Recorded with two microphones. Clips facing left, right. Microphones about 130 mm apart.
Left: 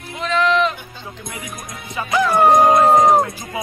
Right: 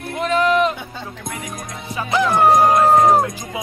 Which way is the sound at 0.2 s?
45° right (ahead or behind).